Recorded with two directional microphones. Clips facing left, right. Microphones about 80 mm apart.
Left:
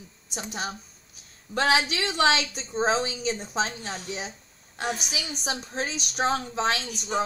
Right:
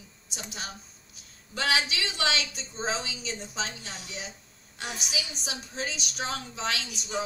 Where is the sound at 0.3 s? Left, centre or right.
Left.